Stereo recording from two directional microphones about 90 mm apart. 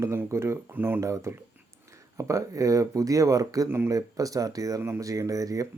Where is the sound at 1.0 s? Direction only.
35° right (ahead or behind).